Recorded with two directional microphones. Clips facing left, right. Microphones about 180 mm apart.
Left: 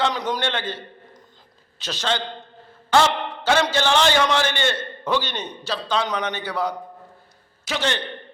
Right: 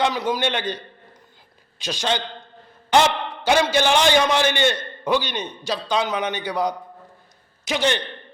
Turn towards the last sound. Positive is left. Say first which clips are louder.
# right 3 dB
turn(degrees=-15)  # may be behind; listen again after turning